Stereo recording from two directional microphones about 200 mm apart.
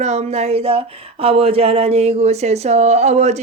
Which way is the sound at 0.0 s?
35° right (ahead or behind).